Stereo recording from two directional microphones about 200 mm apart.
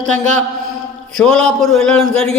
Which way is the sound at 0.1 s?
35° right (ahead or behind).